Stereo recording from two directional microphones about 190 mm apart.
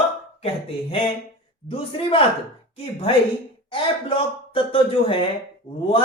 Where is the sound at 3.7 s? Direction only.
30° left (ahead or behind).